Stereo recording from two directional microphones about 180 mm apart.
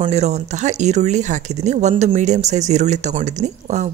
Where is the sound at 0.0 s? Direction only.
40° right (ahead or behind).